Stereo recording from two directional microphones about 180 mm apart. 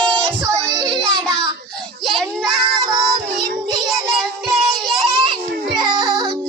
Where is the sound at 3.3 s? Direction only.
55° right (ahead or behind).